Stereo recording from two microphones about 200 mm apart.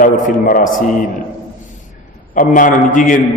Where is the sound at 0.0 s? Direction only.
45° left (ahead or behind).